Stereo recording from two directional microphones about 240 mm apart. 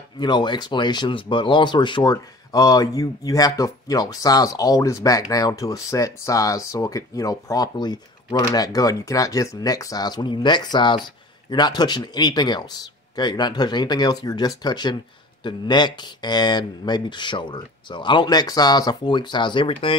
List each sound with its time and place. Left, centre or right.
0.2 s speech: centre